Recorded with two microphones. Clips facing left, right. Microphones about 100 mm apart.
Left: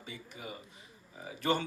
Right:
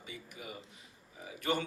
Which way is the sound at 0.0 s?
30° left (ahead or behind).